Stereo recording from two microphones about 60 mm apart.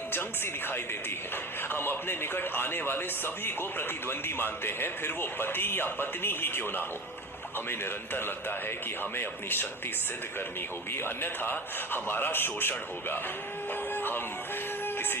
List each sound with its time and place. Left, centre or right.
0.1 s speech: left
10.9 s speech: left
13.9 s music: left
14.8 s a sound: left